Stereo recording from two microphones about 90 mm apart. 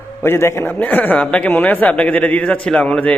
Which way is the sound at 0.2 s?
25° left (ahead or behind).